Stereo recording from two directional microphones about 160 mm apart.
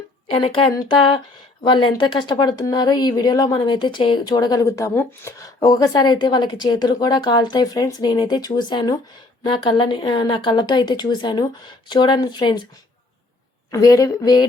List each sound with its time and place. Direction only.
0.3 s speech: 35° left (ahead or behind)
13.7 s speech: 20° left (ahead or behind)